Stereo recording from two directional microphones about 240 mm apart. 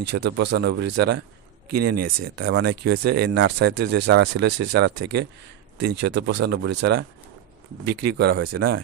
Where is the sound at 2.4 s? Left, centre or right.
Right.